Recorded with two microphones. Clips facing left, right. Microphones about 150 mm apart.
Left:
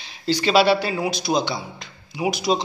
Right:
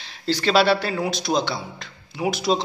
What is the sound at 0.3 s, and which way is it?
A man's voice, centre (ahead or behind).